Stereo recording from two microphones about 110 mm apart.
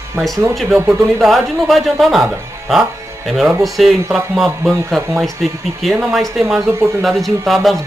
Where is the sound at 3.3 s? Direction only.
Centre (ahead or behind).